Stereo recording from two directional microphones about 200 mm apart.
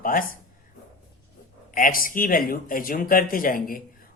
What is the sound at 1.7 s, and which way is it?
Speech, 45° left (ahead or behind).